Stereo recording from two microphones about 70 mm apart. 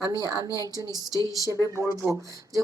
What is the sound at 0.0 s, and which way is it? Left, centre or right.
A woman's voice, right.